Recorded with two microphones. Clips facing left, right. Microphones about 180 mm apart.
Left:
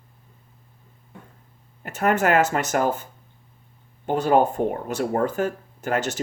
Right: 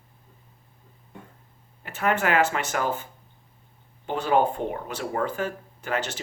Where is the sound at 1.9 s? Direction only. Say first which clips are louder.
Left 4 dB; 45° left (ahead or behind).